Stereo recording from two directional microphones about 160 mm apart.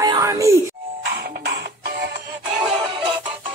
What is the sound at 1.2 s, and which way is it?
Music, 85° right.